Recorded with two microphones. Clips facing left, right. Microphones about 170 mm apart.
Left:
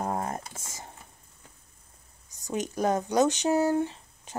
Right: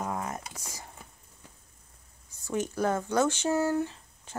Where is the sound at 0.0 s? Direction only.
40° left (ahead or behind).